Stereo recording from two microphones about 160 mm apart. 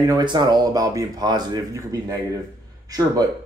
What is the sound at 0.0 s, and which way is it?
Speech, 25° right (ahead or behind).